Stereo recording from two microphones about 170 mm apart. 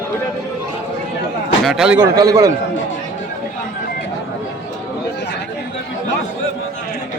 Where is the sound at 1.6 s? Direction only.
5° right (ahead or behind).